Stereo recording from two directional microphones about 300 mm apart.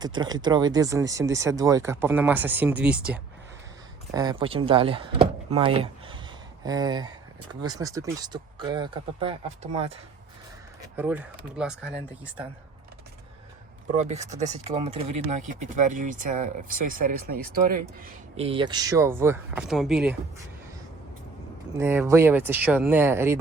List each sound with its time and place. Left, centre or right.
0.0 s speech: centre
10.9 s speech: centre
14.3 s speech: right
18.3 s speech: centre
21.8 s speech: centre